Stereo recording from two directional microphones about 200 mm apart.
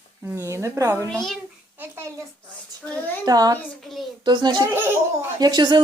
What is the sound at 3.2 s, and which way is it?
Speech, 20° right (ahead or behind).